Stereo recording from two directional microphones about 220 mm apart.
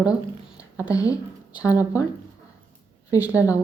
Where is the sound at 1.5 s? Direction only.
5° right (ahead or behind).